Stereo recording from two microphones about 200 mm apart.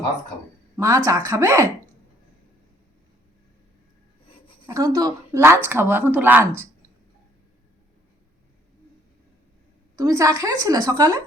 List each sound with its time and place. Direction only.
0.8 s a woman's voice: 15° right (ahead or behind)
4.6 s a woman's voice: 15° right (ahead or behind)
9.9 s a woman's voice: 15° right (ahead or behind)